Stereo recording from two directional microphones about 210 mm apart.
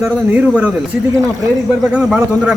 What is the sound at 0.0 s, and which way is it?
Speech, 5° right (ahead or behind).